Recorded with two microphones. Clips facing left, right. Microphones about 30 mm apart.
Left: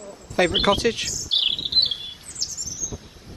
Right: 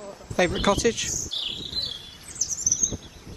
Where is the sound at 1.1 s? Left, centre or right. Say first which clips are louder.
Left 8 dB; left.